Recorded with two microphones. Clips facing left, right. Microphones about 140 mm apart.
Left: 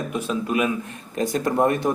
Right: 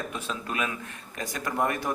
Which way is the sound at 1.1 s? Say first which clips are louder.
Left 9 dB; 30° left (ahead or behind).